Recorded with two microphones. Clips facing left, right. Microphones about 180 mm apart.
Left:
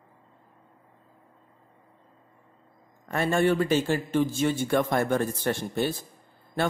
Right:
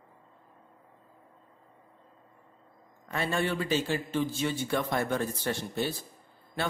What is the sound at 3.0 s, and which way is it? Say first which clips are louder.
A man's voice: left 7 dB; 50° left (ahead or behind).